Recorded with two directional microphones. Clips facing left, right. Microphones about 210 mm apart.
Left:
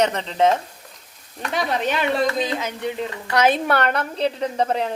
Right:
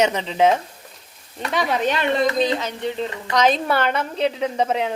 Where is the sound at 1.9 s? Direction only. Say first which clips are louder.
Even; 5° left (ahead or behind).